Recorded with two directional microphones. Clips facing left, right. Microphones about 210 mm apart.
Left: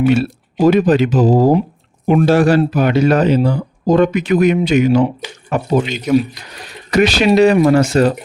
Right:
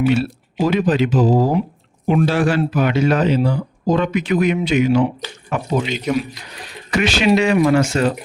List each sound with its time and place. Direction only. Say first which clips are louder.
0.0 s a man's voice: left 3 dB; 50° left (ahead or behind)
6.1 s speech: left 7 dB; 5° left (ahead or behind)
6.9 s a man's voice: left 4 dB; 40° left (ahead or behind)